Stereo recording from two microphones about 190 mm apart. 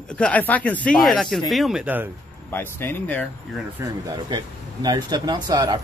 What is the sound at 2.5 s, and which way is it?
Speech, 10° left (ahead or behind).